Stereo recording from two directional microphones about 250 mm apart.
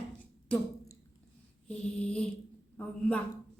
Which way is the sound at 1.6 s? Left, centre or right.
Centre.